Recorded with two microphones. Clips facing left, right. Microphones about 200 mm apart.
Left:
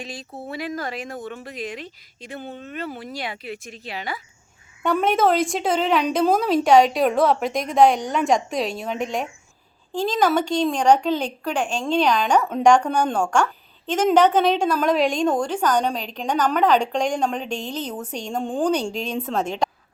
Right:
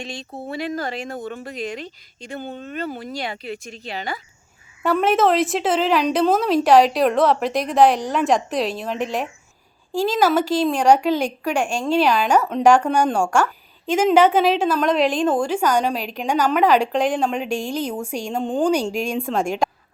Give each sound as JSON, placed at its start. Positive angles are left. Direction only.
{"t": 0.0, "sound": "a woman's voice", "side_deg": 5}
{"t": 1.1, "sound": "speech", "side_deg": -30}
{"t": 1.5, "sound": "a woman's voice", "side_deg": 0}
{"t": 2.5, "sound": "speech", "side_deg": -35}
{"t": 2.7, "sound": "a woman's voice", "side_deg": 0}